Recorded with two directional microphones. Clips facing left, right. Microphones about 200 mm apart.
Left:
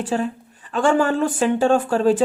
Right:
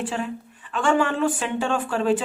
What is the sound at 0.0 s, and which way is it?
Speech, 40° left (ahead or behind).